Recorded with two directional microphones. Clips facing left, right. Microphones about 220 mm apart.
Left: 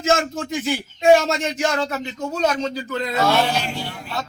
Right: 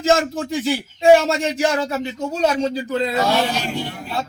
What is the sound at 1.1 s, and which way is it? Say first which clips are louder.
A man's voice: right 2 dB; 30° right (ahead or behind).